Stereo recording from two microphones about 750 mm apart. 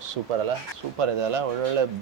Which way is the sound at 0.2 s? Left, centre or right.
Right.